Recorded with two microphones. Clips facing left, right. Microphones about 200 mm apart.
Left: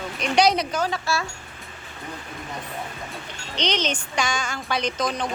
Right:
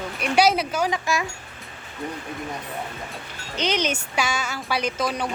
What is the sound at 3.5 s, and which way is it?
Speech, 5° right (ahead or behind).